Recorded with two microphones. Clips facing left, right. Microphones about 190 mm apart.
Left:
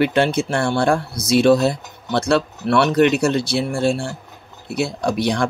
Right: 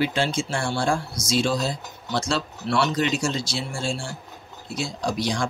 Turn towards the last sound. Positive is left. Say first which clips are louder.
# left 6 dB
turn(degrees=60)  # may be behind; listen again after turning